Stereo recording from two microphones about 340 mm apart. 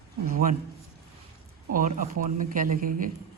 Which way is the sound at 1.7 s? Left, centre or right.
Right.